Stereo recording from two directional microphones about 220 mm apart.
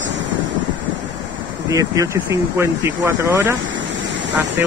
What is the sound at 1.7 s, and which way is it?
Speech, 15° right (ahead or behind).